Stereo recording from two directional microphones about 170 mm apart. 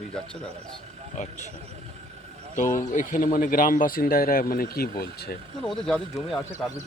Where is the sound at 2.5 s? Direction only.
50° left (ahead or behind); by 5.4 s 65° left (ahead or behind).